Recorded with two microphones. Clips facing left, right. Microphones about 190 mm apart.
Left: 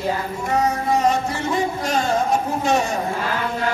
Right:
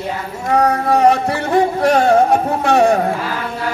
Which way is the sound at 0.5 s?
65° right (ahead or behind).